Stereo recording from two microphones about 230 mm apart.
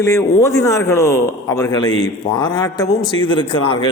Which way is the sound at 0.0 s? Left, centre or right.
Centre.